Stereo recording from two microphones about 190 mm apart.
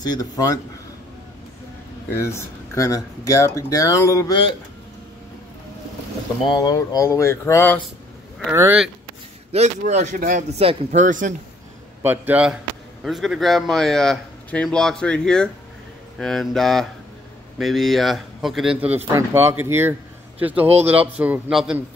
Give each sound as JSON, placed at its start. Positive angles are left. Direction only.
{"t": 0.0, "sound": "speech", "side_deg": 20}
{"t": 2.0, "sound": "speech", "side_deg": 15}
{"t": 6.4, "sound": "speech", "side_deg": 25}
{"t": 8.5, "sound": "speech", "side_deg": -10}
{"t": 9.5, "sound": "speech", "side_deg": -35}
{"t": 12.0, "sound": "a man's voice", "side_deg": -10}